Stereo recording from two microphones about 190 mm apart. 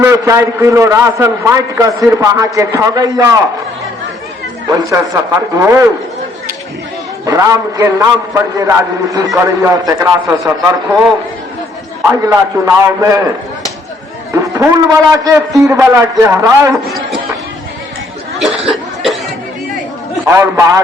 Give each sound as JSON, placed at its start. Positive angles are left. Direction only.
{"t": 0.0, "sound": "a man's voice", "side_deg": -15}
{"t": 4.7, "sound": "a man's voice", "side_deg": -15}
{"t": 7.3, "sound": "a man's voice", "side_deg": -15}
{"t": 9.1, "sound": "a man's voice", "side_deg": -15}
{"t": 12.0, "sound": "a man's voice", "side_deg": -15}
{"t": 14.3, "sound": "a man's voice", "side_deg": -15}
{"t": 18.3, "sound": "speech", "side_deg": 0}
{"t": 20.2, "sound": "a man's voice", "side_deg": -15}